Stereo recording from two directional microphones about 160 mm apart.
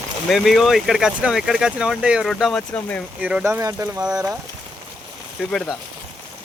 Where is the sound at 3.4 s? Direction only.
20° right (ahead or behind).